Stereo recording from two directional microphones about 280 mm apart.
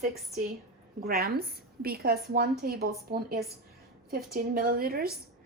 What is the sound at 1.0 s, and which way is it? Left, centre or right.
A woman's voice, right.